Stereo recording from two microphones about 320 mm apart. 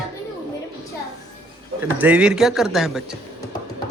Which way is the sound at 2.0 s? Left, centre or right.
Centre.